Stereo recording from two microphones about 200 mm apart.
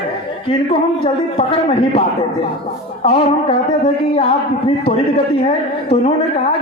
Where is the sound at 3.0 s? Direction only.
30° left (ahead or behind).